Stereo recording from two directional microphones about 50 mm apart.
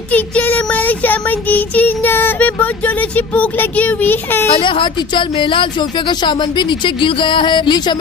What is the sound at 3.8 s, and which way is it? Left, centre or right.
Child singing, left.